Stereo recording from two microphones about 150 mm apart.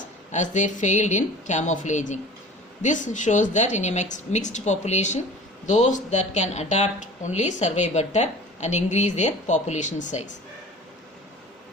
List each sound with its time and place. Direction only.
0.3 s speech: 55° left (ahead or behind)